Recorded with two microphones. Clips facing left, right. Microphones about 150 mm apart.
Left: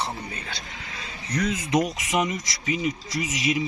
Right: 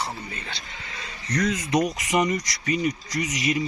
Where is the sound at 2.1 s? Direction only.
Centre (ahead or behind).